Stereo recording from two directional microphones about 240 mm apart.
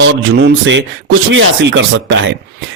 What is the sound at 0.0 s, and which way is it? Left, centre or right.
A man's voice, right.